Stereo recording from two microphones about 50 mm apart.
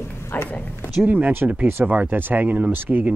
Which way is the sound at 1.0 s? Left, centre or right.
Right.